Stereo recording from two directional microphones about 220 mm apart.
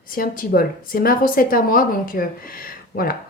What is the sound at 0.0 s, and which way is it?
A woman's voice, 40° left (ahead or behind).